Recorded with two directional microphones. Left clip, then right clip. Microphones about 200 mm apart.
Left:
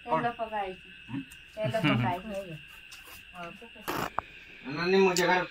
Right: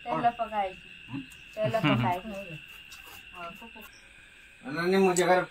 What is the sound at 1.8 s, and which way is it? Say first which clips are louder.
Speech: left 1 dB; 10° right (ahead or behind).